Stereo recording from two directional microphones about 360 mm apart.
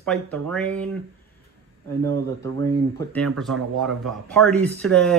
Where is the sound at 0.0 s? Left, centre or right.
Centre.